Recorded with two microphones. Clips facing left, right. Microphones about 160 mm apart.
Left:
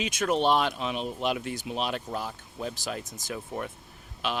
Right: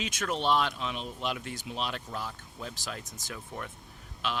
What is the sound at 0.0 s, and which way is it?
Speech, 15° left (ahead or behind).